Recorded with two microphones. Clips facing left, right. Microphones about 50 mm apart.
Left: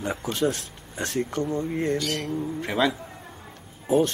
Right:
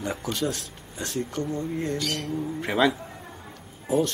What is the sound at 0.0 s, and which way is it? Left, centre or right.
Speech, centre.